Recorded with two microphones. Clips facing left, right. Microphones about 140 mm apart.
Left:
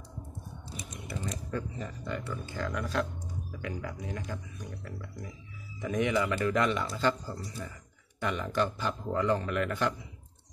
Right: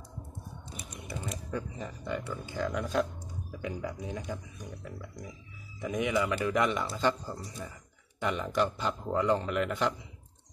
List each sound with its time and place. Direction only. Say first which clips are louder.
0.8 s typing: left 1 dB; 10° right (ahead or behind)
1.8 s speech: right 1 dB; 15° right (ahead or behind)